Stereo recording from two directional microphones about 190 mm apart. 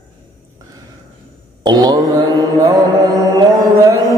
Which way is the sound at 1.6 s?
20° right (ahead or behind).